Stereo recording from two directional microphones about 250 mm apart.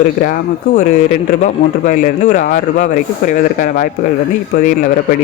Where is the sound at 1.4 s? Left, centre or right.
Left.